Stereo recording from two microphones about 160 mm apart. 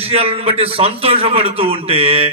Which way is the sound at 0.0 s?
35° right (ahead or behind).